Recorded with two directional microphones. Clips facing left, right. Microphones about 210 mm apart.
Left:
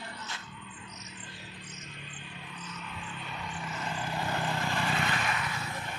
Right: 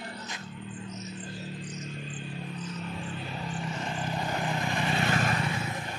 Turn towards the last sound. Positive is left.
turn(degrees=-25)  # may be behind; listen again after turning